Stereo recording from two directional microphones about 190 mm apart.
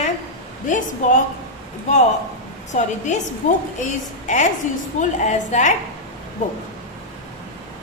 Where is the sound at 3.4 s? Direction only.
40° left (ahead or behind).